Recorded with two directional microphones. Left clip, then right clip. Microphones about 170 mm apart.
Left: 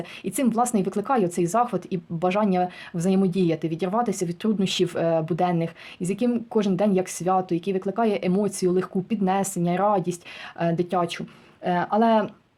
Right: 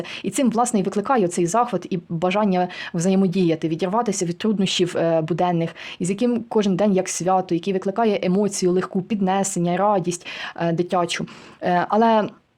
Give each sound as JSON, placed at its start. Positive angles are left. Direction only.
{"t": 0.3, "sound": "speech", "side_deg": -30}